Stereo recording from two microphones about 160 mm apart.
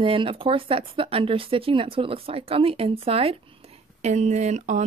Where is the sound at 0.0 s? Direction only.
35° right (ahead or behind).